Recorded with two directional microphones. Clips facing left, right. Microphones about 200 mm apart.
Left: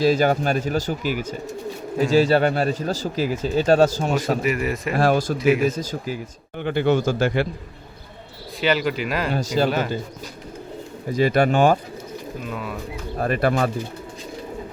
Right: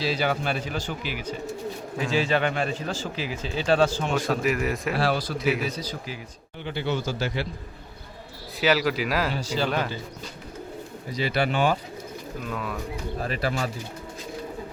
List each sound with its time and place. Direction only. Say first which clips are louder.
0.0 s speech: left 8 dB; 45° left (ahead or behind)
4.4 s speech: left 2 dB; centre (ahead or behind)
4.9 s speech: left 9 dB; 50° left (ahead or behind)
5.4 s speech: left 7 dB; centre (ahead or behind)
5.6 s speech: left 8 dB; 45° left (ahead or behind)
8.6 s speech: left 1 dB; centre (ahead or behind)
9.3 s speech: left 6 dB; 45° left (ahead or behind)
9.6 s speech: left 4 dB; 5° left (ahead or behind)
11.1 s speech: left 7 dB; 50° left (ahead or behind)
12.5 s speech: even; 5° left (ahead or behind)
13.1 s speech: left 8 dB; 55° left (ahead or behind)